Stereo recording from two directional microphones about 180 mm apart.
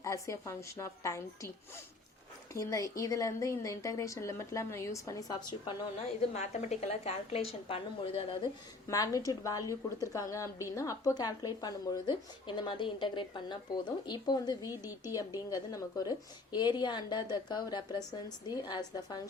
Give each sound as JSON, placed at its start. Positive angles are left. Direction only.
{"t": 0.0, "sound": "a woman's voice", "side_deg": 15}
{"t": 2.5, "sound": "a woman's voice", "side_deg": 15}
{"t": 6.3, "sound": "a woman's voice", "side_deg": 40}
{"t": 8.9, "sound": "a woman's voice", "side_deg": 20}